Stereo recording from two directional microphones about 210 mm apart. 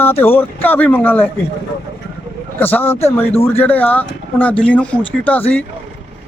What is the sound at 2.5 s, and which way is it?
Speech, 10° left (ahead or behind).